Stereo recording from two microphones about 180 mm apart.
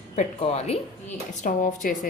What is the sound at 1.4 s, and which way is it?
Speech, 50° left (ahead or behind).